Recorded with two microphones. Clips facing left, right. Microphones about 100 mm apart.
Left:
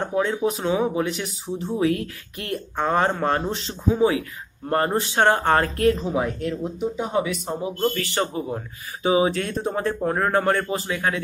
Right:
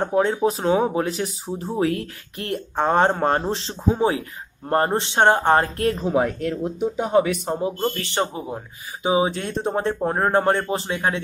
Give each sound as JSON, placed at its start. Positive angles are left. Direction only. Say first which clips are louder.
{"t": 0.0, "sound": "speech", "louder": "right 3 dB", "side_deg": -35}
{"t": 5.8, "sound": "speech", "louder": "even", "side_deg": -35}
{"t": 7.0, "sound": "speech", "louder": "right 7 dB", "side_deg": -55}
{"t": 8.0, "sound": "speech", "louder": "even", "side_deg": -20}